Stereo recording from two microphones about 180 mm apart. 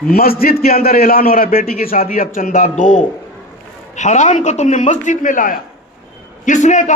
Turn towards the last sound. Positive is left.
turn(degrees=40)  # may be behind; listen again after turning